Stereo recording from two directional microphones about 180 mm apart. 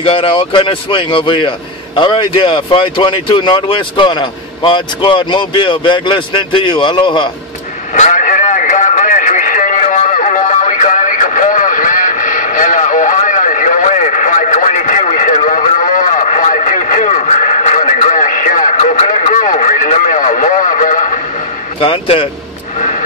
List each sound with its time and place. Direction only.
0.0 s speech: 30° left (ahead or behind)
7.9 s a sound: 45° left (ahead or behind)
21.7 s speech: 30° left (ahead or behind)